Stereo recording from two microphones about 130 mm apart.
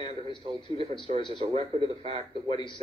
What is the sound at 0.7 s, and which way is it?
Speech, 55° right (ahead or behind).